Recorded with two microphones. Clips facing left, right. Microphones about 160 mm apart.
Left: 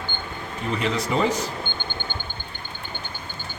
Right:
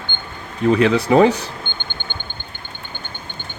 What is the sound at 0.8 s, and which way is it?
Speech, 75° right (ahead or behind).